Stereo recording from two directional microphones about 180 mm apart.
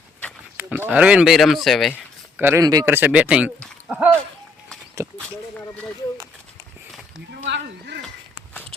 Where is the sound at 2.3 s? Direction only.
10° right (ahead or behind).